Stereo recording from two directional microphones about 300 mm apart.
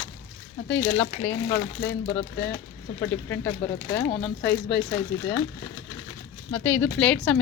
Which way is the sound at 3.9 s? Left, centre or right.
Centre.